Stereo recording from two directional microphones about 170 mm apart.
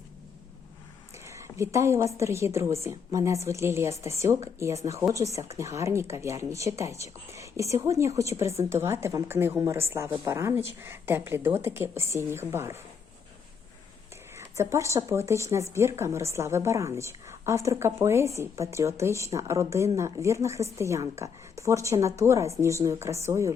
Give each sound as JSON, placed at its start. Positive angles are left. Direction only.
{"t": 1.2, "sound": "speech", "side_deg": -15}
{"t": 14.3, "sound": "speech", "side_deg": -15}